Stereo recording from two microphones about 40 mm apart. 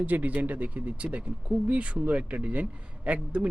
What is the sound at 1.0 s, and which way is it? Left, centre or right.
Speech, right.